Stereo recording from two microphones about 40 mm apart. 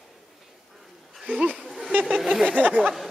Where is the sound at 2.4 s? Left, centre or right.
Right.